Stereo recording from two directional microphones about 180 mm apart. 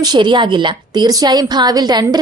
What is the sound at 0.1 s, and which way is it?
A woman's voice, 25° right (ahead or behind).